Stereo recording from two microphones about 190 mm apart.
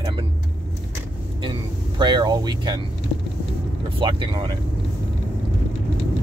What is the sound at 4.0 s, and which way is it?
Speech, 25° right (ahead or behind).